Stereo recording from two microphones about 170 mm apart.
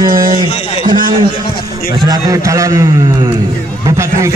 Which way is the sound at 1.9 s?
25° right (ahead or behind).